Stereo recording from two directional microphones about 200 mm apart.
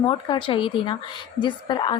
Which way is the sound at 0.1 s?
25° left (ahead or behind).